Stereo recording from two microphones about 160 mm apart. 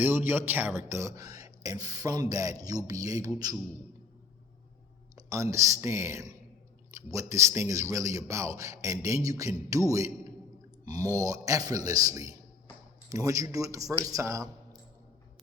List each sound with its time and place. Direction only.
0.0 s a man's voice: 15° right (ahead or behind)
5.1 s a man's voice: 20° right (ahead or behind)